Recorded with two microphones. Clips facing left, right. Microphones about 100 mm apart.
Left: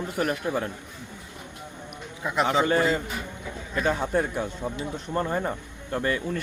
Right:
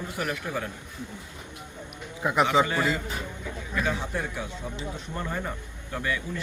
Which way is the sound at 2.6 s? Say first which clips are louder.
Left 4 dB; 35° left (ahead or behind).